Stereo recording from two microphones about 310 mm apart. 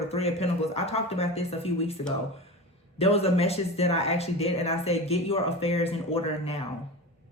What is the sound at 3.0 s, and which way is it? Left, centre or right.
Speech, centre.